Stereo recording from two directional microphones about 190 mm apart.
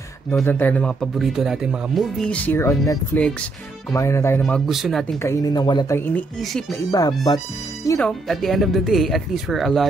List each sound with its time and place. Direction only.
0.4 s speech: 10° left (ahead or behind)
4.4 s speech: centre (ahead or behind)
5.2 s speech: 15° left (ahead or behind)
5.9 s speech: 10° left (ahead or behind)
6.9 s speech: 20° left (ahead or behind)
8.0 s speech: centre (ahead or behind)